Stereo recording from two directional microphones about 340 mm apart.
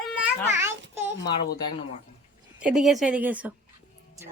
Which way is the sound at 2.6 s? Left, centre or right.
Centre.